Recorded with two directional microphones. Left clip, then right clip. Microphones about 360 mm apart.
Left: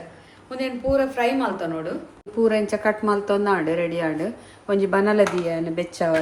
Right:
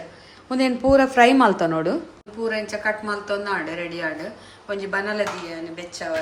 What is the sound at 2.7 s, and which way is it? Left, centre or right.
Speech, centre.